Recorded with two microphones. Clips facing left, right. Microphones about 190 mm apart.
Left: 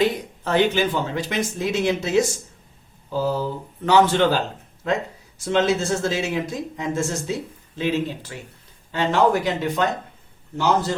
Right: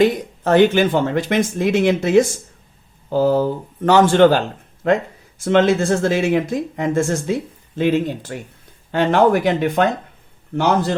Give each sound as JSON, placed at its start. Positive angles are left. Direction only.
{"t": 0.0, "sound": "speech", "side_deg": -50}